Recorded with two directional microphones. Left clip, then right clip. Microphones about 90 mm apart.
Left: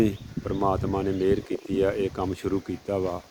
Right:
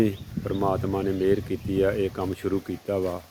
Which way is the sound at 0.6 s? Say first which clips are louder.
Even; 5° left (ahead or behind).